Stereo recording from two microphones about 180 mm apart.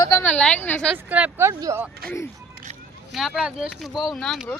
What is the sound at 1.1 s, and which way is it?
Speech, 10° right (ahead or behind).